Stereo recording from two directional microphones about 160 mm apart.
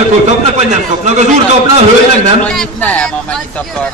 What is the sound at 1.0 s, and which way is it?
Speech, 45° right (ahead or behind).